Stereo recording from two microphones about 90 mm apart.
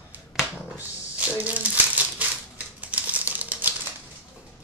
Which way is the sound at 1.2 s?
15° right (ahead or behind).